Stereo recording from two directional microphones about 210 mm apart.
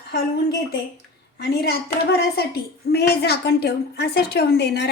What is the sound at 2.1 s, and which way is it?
Speech, 50° left (ahead or behind).